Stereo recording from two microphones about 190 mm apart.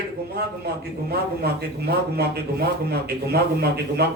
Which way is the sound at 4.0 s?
55° right (ahead or behind).